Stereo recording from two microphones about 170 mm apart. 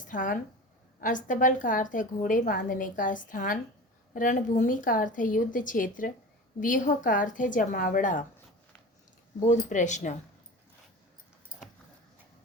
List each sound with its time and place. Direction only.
0.1 s a woman's voice: 50° left (ahead or behind)
9.5 s a woman's voice: 45° left (ahead or behind)